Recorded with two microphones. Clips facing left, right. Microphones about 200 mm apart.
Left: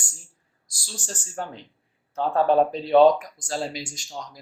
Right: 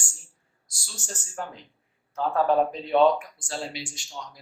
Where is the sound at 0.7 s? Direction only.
30° left (ahead or behind).